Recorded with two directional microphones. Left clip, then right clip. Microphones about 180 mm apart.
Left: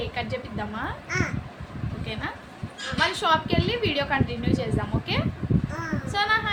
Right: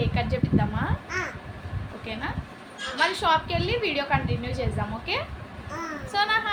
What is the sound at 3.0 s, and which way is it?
A woman's voice, centre (ahead or behind).